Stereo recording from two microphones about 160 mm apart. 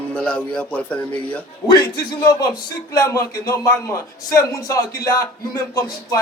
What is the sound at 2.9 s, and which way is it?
Speech, 20° left (ahead or behind).